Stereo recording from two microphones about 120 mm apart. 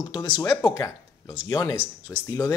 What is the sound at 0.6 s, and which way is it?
Speech, 30° left (ahead or behind).